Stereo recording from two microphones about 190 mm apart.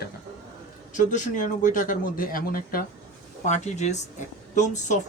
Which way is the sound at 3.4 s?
40° left (ahead or behind).